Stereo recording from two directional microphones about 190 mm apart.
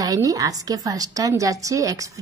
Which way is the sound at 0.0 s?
20° right (ahead or behind).